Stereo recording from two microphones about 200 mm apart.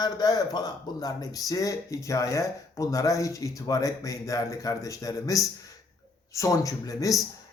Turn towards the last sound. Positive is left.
turn(degrees=15)  # may be behind; listen again after turning